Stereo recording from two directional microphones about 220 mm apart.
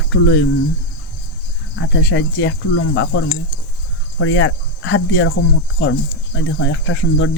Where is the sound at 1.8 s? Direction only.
55° left (ahead or behind).